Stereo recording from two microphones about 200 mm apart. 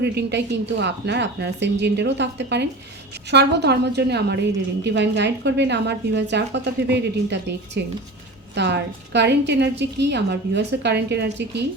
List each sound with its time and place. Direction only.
0.0 s a woman's voice: 55° right (ahead or behind)